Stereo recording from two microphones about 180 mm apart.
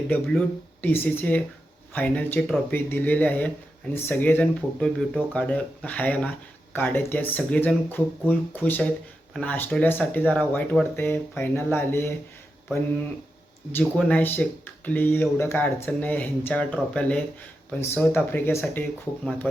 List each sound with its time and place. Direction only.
0.1 s speech: 10° left (ahead or behind)
13.7 s speech: 10° left (ahead or behind)